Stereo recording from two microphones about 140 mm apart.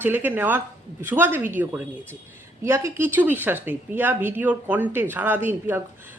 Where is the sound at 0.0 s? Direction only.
15° right (ahead or behind).